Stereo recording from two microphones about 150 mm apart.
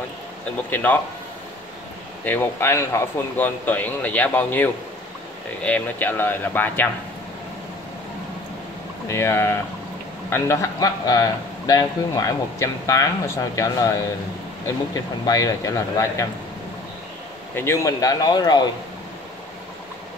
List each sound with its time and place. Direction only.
0.7 s speech: 15° left (ahead or behind)
2.2 s speech: 15° left (ahead or behind)
9.1 s a man's voice: 15° left (ahead or behind)
15.2 s a man's voice: 25° left (ahead or behind)
17.6 s a man's voice: 20° left (ahead or behind)